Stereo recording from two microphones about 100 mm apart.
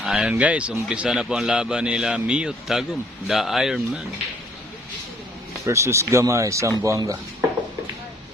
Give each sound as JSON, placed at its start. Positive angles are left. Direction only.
{"t": 0.0, "sound": "a man's voice", "side_deg": -5}
{"t": 5.6, "sound": "speech", "side_deg": -30}